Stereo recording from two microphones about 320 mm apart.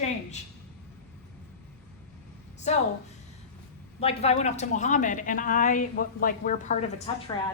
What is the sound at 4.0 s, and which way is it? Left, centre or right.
A woman's voice, centre.